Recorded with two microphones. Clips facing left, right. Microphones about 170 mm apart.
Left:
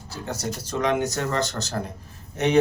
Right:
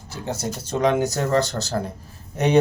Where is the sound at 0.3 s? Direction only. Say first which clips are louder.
Right 3 dB; 25° right (ahead or behind).